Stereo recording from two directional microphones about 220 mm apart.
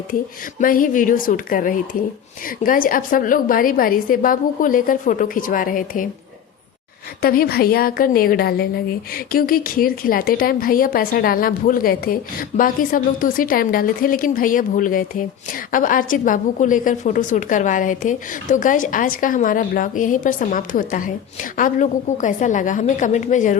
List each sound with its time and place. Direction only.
0.6 s a woman's voice: 40° left (ahead or behind)
7.2 s a woman's voice: 45° left (ahead or behind)